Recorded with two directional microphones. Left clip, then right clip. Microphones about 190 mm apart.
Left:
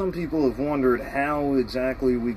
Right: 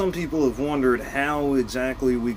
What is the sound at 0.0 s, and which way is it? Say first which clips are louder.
Speech: right 1 dB; 10° right (ahead or behind).